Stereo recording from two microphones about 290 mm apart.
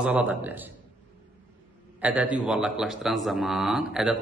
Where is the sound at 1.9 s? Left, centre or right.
Centre.